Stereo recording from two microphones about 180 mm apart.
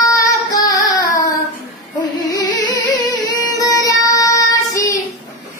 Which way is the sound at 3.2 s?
20° left (ahead or behind).